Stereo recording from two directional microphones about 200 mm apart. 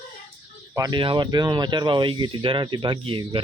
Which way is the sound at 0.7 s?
20° right (ahead or behind).